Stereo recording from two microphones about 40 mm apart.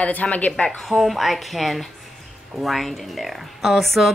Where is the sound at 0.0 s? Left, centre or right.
Left.